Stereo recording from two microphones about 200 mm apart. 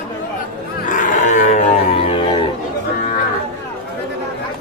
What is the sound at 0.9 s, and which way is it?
Livestock, 40° left (ahead or behind).